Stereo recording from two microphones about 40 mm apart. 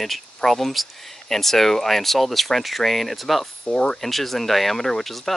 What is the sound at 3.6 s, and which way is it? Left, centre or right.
Speech, centre.